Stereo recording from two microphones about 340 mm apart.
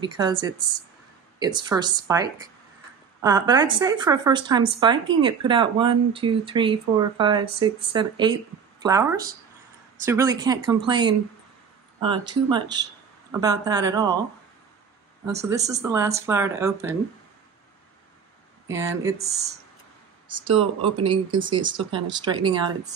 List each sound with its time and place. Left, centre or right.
0.0 s speech: centre
15.3 s speech: centre
18.7 s speech: centre